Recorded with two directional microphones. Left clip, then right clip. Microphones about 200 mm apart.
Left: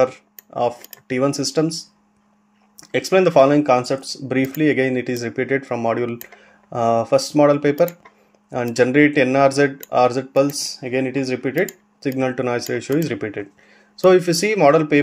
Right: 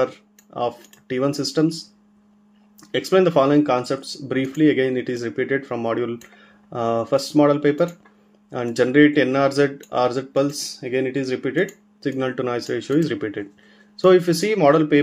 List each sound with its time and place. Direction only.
0.0 s speech: 30° left (ahead or behind)
2.8 s speech: 30° left (ahead or behind)